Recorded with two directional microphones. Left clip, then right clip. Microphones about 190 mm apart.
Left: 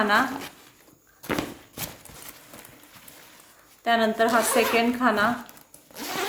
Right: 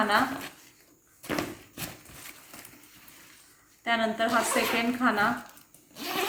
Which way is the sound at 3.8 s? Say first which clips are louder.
Left 5 dB; 55° left (ahead or behind).